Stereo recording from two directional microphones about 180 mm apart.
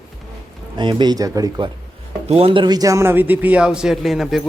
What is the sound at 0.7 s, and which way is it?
Speech, 25° right (ahead or behind).